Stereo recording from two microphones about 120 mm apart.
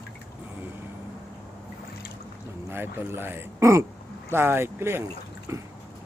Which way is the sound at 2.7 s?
20° right (ahead or behind).